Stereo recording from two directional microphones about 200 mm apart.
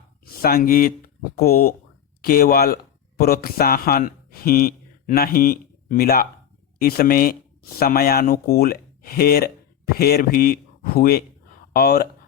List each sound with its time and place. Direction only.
0.3 s speech: 50° left (ahead or behind)